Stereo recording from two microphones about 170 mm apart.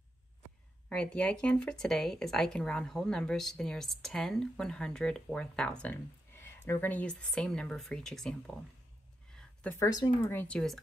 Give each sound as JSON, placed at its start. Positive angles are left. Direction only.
{"t": 0.8, "sound": "speech", "side_deg": 5}
{"t": 9.8, "sound": "speech", "side_deg": 20}
{"t": 10.5, "sound": "speech", "side_deg": 0}